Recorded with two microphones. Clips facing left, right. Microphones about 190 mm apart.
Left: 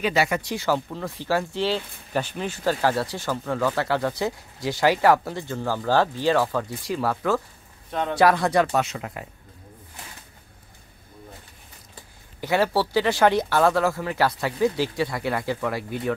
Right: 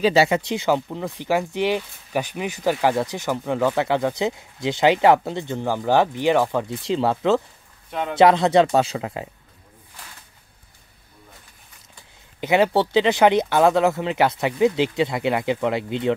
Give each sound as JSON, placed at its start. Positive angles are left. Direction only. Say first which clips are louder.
{"t": 0.0, "sound": "speech", "louder": "right 5 dB", "side_deg": -25}
{"t": 7.9, "sound": "a man's voice", "louder": "even", "side_deg": 0}
{"t": 8.2, "sound": "speech", "louder": "right 5 dB", "side_deg": -20}
{"t": 12.4, "sound": "speech", "louder": "right 4 dB", "side_deg": -20}